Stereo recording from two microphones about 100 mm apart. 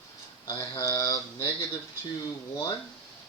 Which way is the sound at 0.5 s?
30° left (ahead or behind).